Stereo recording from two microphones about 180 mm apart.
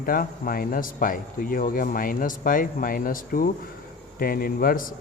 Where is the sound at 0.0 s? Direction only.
50° left (ahead or behind).